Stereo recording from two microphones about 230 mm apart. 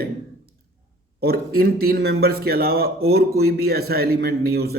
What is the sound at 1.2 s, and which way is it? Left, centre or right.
A man's voice, right.